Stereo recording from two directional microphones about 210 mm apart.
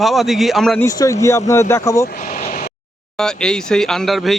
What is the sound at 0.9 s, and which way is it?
Speech, 15° left (ahead or behind).